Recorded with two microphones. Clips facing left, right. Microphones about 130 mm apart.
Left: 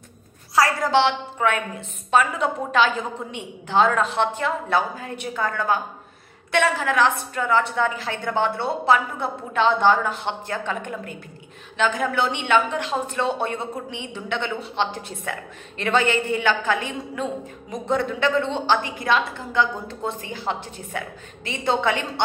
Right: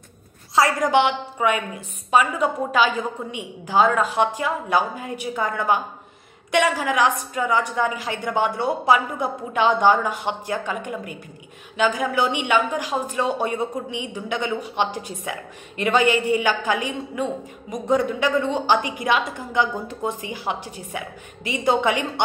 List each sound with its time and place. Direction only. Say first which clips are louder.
0.6 s a woman's voice: right 1 dB; 15° right (ahead or behind)